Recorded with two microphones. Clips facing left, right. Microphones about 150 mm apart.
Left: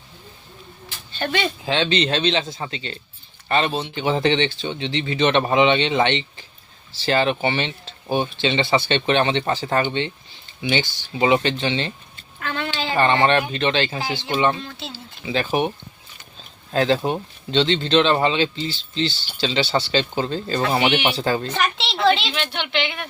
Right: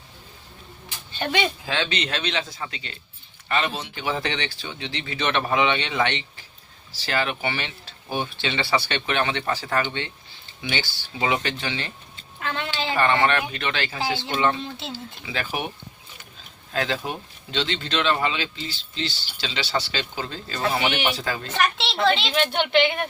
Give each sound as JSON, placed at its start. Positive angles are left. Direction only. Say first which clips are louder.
{"t": 0.9, "sound": "a sound", "louder": "left 2 dB", "side_deg": -15}
{"t": 1.6, "sound": "speech", "louder": "left 6 dB", "side_deg": 25}
{"t": 12.4, "sound": "a sound", "louder": "left 2 dB", "side_deg": -20}
{"t": 12.7, "sound": "speech", "louder": "left 3 dB", "side_deg": 25}
{"t": 14.6, "sound": "speech", "louder": "right 1 dB", "side_deg": -20}
{"t": 15.2, "sound": "speech", "louder": "left 9 dB", "side_deg": 25}
{"t": 16.7, "sound": "speech", "louder": "left 7 dB", "side_deg": 30}
{"t": 21.6, "sound": "a child's voice", "louder": "right 1 dB", "side_deg": 0}
{"t": 22.3, "sound": "a woman's voice", "louder": "right 5 dB", "side_deg": -45}